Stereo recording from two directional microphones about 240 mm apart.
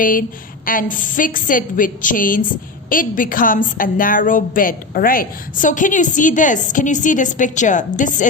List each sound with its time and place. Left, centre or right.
0.0 s a woman's voice: left